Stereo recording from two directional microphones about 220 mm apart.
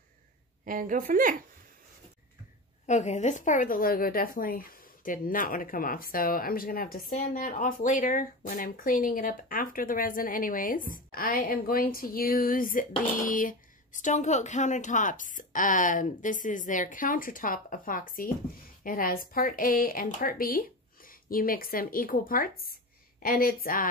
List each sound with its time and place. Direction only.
0.7 s a woman's voice: 35° right (ahead or behind)
2.9 s speech: 30° left (ahead or behind)